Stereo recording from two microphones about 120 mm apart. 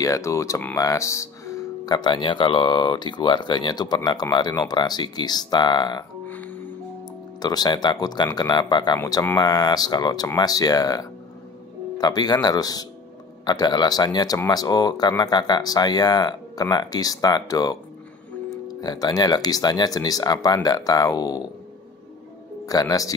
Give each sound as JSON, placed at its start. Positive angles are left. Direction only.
{"t": 0.0, "sound": "speech", "side_deg": 25}
{"t": 6.2, "sound": "music", "side_deg": 15}
{"t": 7.4, "sound": "speech", "side_deg": 35}
{"t": 9.0, "sound": "speech", "side_deg": 20}
{"t": 9.4, "sound": "speech", "side_deg": 35}
{"t": 22.7, "sound": "speech", "side_deg": 30}